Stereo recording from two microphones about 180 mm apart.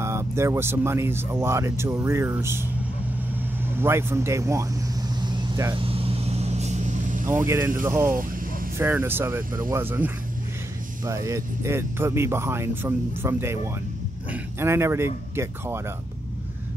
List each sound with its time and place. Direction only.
0.0 s speech: 15° right (ahead or behind)
3.7 s speech: 15° right (ahead or behind)
5.2 s vehicle: 25° right (ahead or behind); by 7.3 s 45° right (ahead or behind)
7.3 s speech: 15° right (ahead or behind)